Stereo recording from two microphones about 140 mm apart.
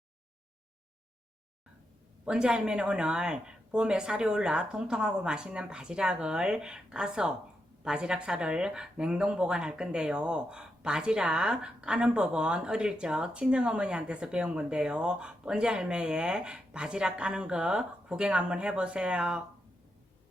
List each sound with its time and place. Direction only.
2.2 s speech: 5° right (ahead or behind)